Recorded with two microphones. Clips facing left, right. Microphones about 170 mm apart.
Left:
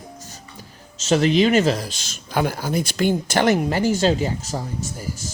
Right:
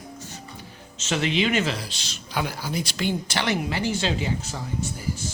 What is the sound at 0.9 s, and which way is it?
Speech, 40° left (ahead or behind).